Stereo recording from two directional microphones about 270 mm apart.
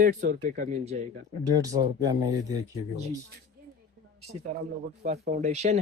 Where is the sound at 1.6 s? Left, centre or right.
Centre.